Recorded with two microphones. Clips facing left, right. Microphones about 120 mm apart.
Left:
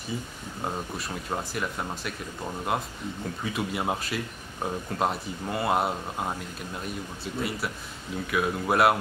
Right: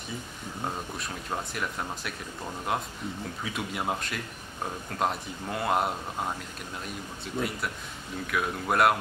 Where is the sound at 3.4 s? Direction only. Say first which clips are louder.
Left 3 dB; centre (ahead or behind).